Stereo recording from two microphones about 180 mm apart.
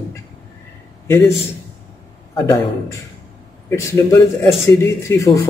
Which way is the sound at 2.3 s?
15° left (ahead or behind).